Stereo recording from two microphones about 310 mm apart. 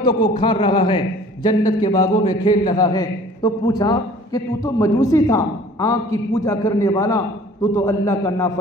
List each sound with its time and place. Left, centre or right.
0.0 s a man's voice: centre